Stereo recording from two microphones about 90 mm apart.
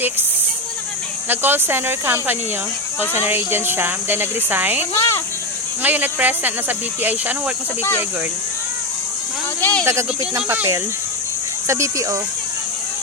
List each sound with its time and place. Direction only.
1.3 s speech: 20° right (ahead or behind)
4.9 s speech: 30° left (ahead or behind)
5.8 s speech: 20° right (ahead or behind)
9.6 s speech: 20° left (ahead or behind)
9.8 s speech: 30° right (ahead or behind)
10.3 s speech: 20° right (ahead or behind)
11.7 s speech: 35° right (ahead or behind)